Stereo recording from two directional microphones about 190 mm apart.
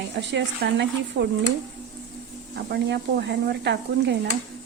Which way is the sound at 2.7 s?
65° right (ahead or behind).